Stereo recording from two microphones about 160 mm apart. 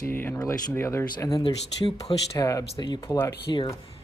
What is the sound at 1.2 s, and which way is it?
Speech, 30° left (ahead or behind).